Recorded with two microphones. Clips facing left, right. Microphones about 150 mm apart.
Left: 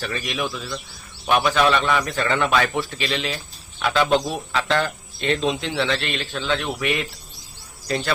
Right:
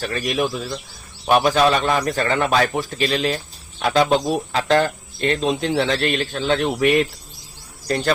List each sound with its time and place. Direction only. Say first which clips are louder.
0.0 s a man's voice: right 5 dB; 45° right (ahead or behind)